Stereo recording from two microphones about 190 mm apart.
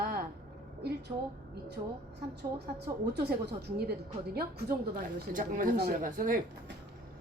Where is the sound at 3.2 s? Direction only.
60° right (ahead or behind).